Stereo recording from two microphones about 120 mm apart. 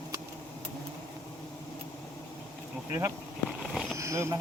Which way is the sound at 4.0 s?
25° right (ahead or behind).